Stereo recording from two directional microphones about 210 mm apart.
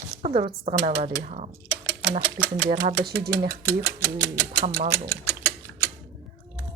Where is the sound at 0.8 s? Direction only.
30° right (ahead or behind).